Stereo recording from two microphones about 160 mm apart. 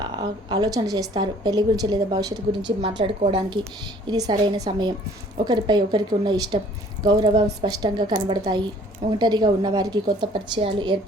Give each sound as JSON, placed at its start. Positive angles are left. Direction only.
{"t": 0.0, "sound": "a woman's voice", "side_deg": -25}